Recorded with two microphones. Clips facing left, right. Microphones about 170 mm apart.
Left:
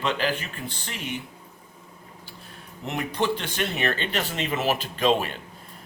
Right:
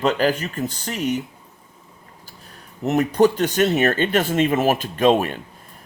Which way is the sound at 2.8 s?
40° right (ahead or behind).